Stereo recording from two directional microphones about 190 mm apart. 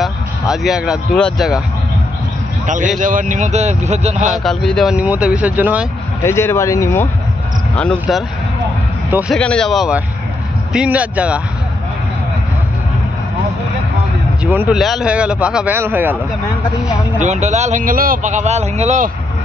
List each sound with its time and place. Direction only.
0.0 s speech: centre (ahead or behind)
2.6 s a man's voice: 40° right (ahead or behind)
4.3 s speech: centre (ahead or behind)
6.2 s speech: 15° left (ahead or behind)
9.3 s a man's voice: 5° left (ahead or behind)
14.4 s a man's voice: 10° right (ahead or behind)
17.2 s a man's voice: 40° right (ahead or behind)